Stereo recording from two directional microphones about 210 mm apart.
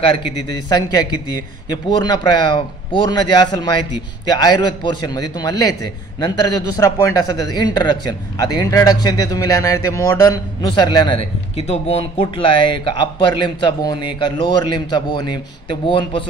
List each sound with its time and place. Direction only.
0.0 s a man's voice: 20° left (ahead or behind)